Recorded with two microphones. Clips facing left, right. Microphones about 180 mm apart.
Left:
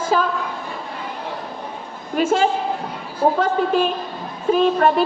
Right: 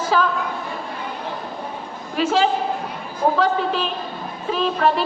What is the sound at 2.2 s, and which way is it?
A woman's voice, 50° left (ahead or behind).